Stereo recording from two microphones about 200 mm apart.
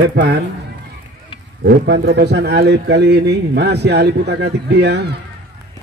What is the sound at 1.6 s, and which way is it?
A man's voice, 55° right (ahead or behind).